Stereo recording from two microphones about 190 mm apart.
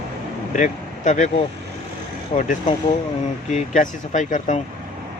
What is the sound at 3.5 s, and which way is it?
Speech, 40° left (ahead or behind).